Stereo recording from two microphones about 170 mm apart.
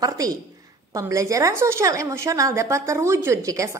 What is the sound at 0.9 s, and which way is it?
A woman's voice, 20° right (ahead or behind).